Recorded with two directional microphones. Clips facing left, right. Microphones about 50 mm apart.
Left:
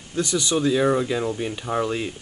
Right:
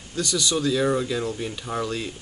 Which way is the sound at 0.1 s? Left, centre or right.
Centre.